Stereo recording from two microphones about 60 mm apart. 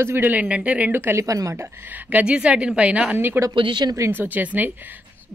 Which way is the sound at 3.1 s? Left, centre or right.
Right.